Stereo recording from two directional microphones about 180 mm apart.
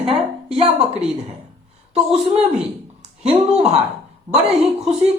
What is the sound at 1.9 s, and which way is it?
A woman's voice, 35° right (ahead or behind).